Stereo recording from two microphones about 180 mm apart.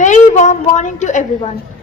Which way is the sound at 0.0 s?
40° left (ahead or behind).